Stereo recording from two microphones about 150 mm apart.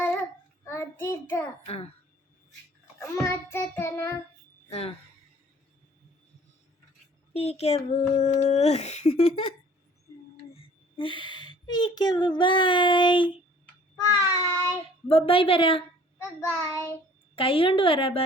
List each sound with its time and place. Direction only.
0.6 s a child's voice: 15° left (ahead or behind)
1.6 s a woman's voice: 40° left (ahead or behind)
3.0 s child singing: 15° left (ahead or behind)
4.7 s a woman's voice: 40° left (ahead or behind)
7.3 s speech: 45° left (ahead or behind)
10.5 s speech: 40° left (ahead or behind)
14.4 s child singing: 20° left (ahead or behind)
15.1 s a woman's voice: 40° left (ahead or behind)
16.1 s child singing: 15° left (ahead or behind)
17.3 s a woman's voice: 35° left (ahead or behind)